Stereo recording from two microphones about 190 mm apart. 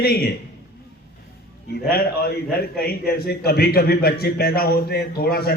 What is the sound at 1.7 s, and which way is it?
A man's voice, 55° left (ahead or behind).